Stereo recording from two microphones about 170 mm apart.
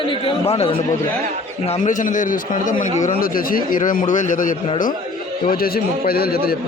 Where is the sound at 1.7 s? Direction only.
50° left (ahead or behind).